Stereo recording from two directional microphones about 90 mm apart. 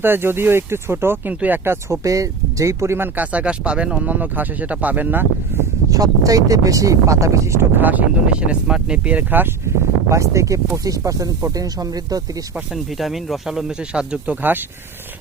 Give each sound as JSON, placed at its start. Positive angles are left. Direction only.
{"t": 0.0, "sound": "speech", "side_deg": -25}
{"t": 2.0, "sound": "speech", "side_deg": -40}
{"t": 3.2, "sound": "speech", "side_deg": -15}
{"t": 5.9, "sound": "speech", "side_deg": -40}
{"t": 7.8, "sound": "speech", "side_deg": -20}
{"t": 9.6, "sound": "speech", "side_deg": -35}
{"t": 12.7, "sound": "speech", "side_deg": 0}